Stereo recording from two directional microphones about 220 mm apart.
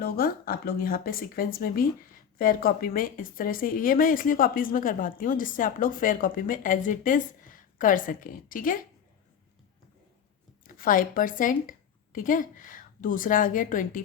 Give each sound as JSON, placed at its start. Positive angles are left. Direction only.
{"t": 0.0, "sound": "speech", "side_deg": 45}
{"t": 10.6, "sound": "speech", "side_deg": 40}